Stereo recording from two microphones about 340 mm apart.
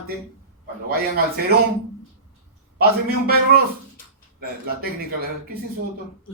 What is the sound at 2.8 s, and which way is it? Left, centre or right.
A man's voice, right.